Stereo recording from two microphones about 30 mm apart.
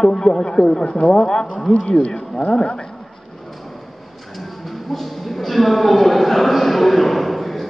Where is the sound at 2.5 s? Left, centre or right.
Left.